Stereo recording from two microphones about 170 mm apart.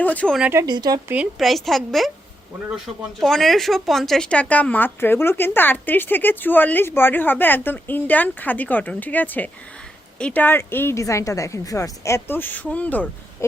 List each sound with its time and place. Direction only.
0.0 s speech: 10° left (ahead or behind)
0.3 s a woman's voice: 10° right (ahead or behind)
0.6 s speech: 25° right (ahead or behind)
1.1 s a woman's voice: 5° right (ahead or behind)